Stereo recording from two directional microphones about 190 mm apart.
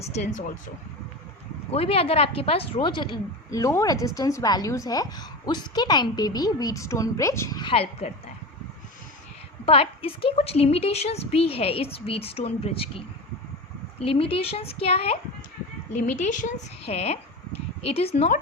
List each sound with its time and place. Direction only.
0.0 s a woman's voice: 35° left (ahead or behind)
1.7 s a woman's voice: 30° left (ahead or behind)
9.6 s a woman's voice: 30° left (ahead or behind)
14.0 s a woman's voice: 30° left (ahead or behind)